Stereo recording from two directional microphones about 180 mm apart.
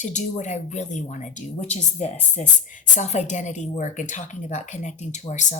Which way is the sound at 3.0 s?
40° left (ahead or behind).